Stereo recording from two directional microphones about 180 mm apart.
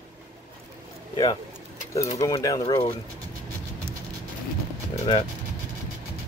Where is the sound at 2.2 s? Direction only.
20° left (ahead or behind).